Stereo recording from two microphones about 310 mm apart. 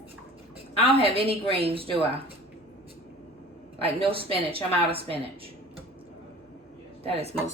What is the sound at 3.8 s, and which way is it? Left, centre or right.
A woman's voice, centre.